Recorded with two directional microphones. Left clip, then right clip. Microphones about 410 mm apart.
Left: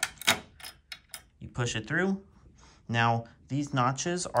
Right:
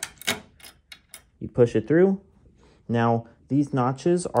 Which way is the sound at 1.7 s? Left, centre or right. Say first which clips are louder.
Right 10 dB; centre.